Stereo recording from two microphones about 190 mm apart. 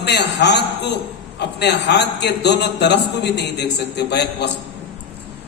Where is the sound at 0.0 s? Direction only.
60° left (ahead or behind).